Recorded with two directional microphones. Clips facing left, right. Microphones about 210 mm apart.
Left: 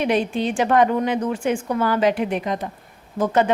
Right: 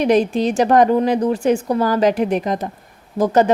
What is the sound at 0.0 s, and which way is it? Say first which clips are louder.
A woman's voice: right 5 dB; 40° right (ahead or behind).